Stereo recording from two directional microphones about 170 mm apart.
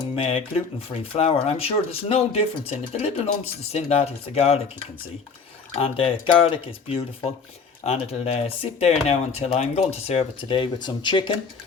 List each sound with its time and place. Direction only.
0.2 s speech: 35° left (ahead or behind)
5.7 s speech: 35° left (ahead or behind)